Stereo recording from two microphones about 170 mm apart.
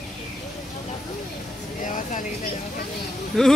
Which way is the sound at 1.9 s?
50° left (ahead or behind).